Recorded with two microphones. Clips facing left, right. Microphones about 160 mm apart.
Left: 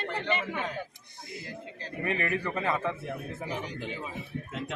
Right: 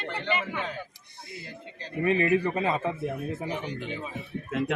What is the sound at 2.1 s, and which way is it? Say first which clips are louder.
Speech: right 7 dB; 20° right (ahead or behind).